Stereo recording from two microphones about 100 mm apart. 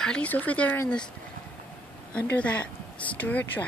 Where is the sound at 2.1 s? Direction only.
15° left (ahead or behind).